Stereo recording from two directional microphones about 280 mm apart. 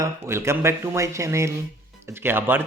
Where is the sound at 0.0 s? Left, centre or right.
Centre.